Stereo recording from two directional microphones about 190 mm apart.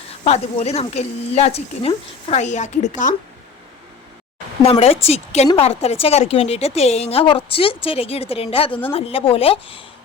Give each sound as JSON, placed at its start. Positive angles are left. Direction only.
{"t": 0.3, "sound": "a woman's voice", "side_deg": 35}
{"t": 4.6, "sound": "a woman's voice", "side_deg": 30}